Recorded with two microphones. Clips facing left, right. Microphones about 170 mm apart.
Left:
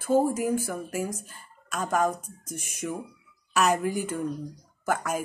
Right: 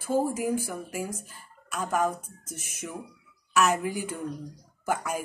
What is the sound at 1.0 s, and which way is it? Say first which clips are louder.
Speech: left 3 dB; 10° right (ahead or behind).